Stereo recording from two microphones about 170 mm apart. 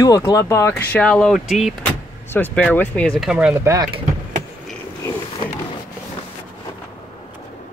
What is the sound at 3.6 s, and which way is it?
Speech, 15° right (ahead or behind).